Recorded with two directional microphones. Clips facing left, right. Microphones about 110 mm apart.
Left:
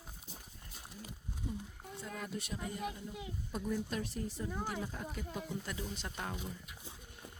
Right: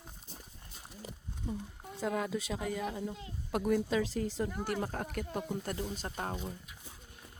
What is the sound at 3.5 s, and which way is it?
Speech, 75° right (ahead or behind).